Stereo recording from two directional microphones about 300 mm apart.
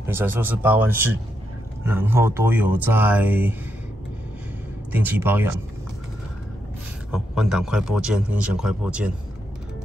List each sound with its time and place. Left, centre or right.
0.0 s speech: centre
4.9 s speech: centre
7.1 s a man's voice: centre